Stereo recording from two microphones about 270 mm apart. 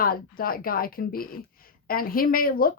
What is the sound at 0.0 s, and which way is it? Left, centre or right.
Speech, left.